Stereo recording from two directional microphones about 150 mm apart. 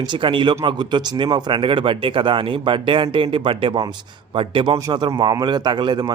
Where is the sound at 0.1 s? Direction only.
35° right (ahead or behind).